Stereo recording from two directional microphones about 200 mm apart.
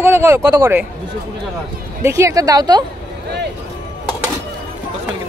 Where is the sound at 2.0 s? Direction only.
15° right (ahead or behind).